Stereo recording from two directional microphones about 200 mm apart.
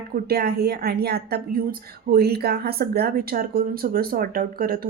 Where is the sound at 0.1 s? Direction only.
50° right (ahead or behind).